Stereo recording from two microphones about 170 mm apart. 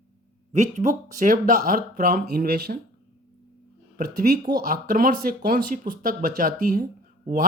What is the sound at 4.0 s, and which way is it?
Speech, 55° right (ahead or behind).